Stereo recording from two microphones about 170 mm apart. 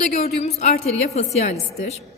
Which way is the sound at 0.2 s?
40° left (ahead or behind).